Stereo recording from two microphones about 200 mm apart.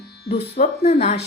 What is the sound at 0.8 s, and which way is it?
Speech, 30° left (ahead or behind).